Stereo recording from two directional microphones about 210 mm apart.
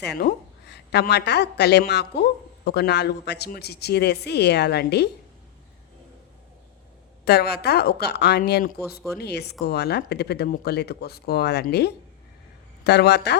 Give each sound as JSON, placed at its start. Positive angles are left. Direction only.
{"t": 0.0, "sound": "a woman's voice", "side_deg": 50}
{"t": 7.3, "sound": "speech", "side_deg": 50}